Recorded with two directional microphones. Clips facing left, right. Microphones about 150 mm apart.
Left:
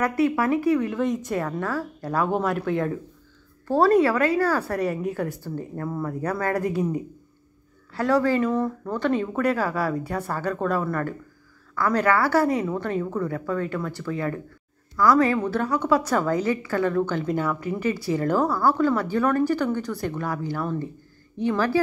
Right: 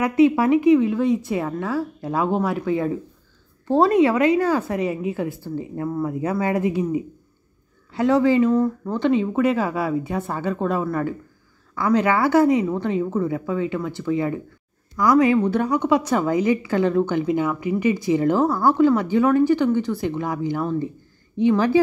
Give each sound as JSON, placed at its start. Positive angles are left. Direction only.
{"t": 0.0, "sound": "speech", "side_deg": -20}
{"t": 3.6, "sound": "speech", "side_deg": -20}
{"t": 21.5, "sound": "a woman's voice", "side_deg": -20}